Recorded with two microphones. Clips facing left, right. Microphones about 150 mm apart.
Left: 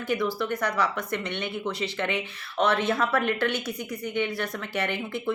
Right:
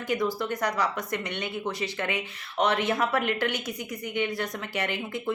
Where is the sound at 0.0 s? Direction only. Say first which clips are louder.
Left 1 dB; 20° right (ahead or behind).